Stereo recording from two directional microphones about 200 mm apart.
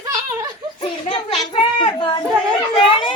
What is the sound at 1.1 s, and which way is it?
A child's voice, 25° left (ahead or behind).